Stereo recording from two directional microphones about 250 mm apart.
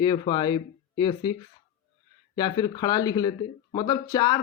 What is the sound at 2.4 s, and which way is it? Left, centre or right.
Speech, centre.